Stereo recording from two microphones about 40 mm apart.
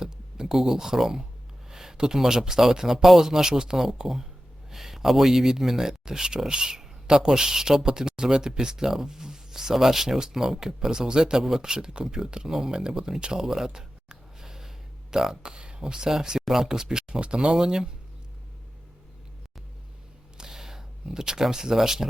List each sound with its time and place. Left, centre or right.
0.0 s speech: centre
17.2 s speech: right
20.4 s a sound: centre